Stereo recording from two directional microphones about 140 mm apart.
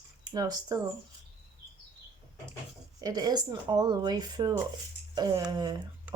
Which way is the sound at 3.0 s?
30° right (ahead or behind).